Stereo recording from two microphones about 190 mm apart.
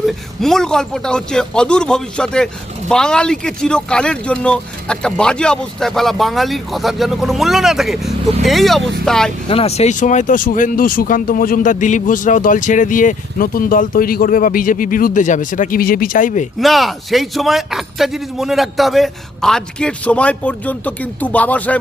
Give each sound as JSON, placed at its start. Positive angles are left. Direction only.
{"t": 0.0, "sound": "speech", "side_deg": 0}
{"t": 9.5, "sound": "speech", "side_deg": 30}
{"t": 16.6, "sound": "speech", "side_deg": 0}